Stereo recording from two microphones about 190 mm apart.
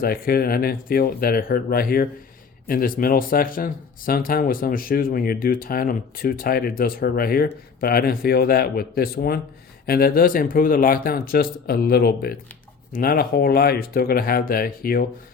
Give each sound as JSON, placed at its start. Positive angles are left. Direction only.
{"t": 0.0, "sound": "speech", "side_deg": 50}